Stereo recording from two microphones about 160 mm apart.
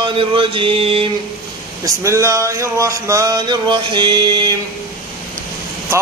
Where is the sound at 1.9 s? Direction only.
20° right (ahead or behind).